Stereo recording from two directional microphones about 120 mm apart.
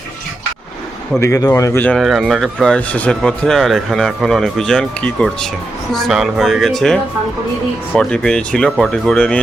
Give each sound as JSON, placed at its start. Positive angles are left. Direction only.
{"t": 1.2, "sound": "a man's voice", "side_deg": 30}
{"t": 2.0, "sound": "speech", "side_deg": 0}